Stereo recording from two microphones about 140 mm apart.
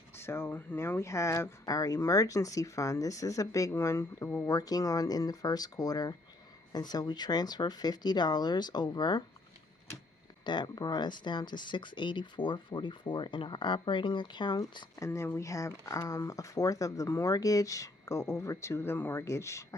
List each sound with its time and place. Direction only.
0.2 s speech: 15° left (ahead or behind)
10.4 s speech: 30° left (ahead or behind)